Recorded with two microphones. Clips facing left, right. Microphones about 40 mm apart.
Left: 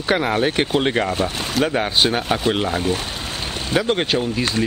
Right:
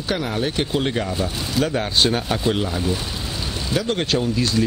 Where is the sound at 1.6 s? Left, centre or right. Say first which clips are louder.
Left 2 dB; centre.